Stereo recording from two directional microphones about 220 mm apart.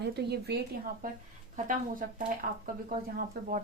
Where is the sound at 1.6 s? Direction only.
35° right (ahead or behind).